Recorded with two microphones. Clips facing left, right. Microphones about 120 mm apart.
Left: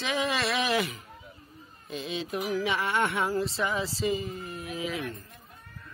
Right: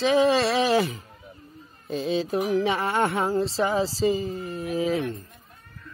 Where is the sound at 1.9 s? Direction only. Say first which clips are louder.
Right 8 dB; 35° right (ahead or behind).